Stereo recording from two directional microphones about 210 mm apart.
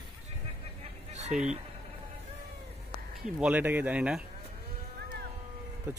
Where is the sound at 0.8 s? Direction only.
30° right (ahead or behind).